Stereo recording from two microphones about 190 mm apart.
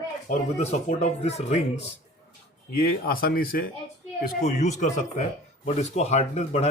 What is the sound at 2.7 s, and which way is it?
Speech, 50° left (ahead or behind).